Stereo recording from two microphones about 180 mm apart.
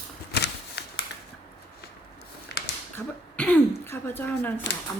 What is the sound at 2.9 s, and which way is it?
Throat clearing, 10° left (ahead or behind).